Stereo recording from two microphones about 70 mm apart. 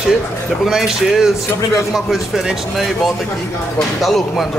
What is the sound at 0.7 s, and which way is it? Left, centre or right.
Speech, centre.